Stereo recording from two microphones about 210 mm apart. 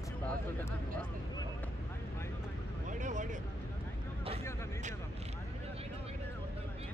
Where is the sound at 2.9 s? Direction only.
35° right (ahead or behind).